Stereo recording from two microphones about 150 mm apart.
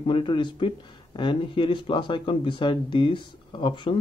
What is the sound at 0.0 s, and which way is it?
Speech, 35° left (ahead or behind).